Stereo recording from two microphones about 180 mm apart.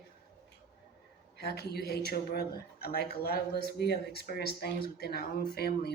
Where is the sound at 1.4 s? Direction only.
65° left (ahead or behind).